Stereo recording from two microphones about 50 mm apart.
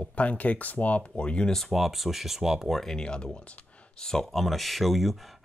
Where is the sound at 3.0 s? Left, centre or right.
Centre.